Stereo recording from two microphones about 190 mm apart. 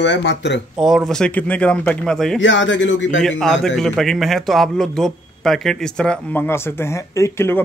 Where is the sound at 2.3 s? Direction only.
80° left.